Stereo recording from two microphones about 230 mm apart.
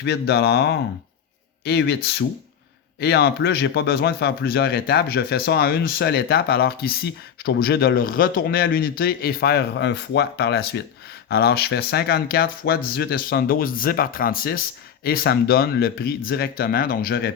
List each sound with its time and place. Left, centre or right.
0.0 s a man's voice: left